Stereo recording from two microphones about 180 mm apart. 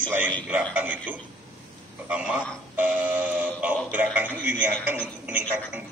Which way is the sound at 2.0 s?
5° right (ahead or behind).